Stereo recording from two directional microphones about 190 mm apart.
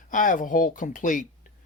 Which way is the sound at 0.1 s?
45° left (ahead or behind).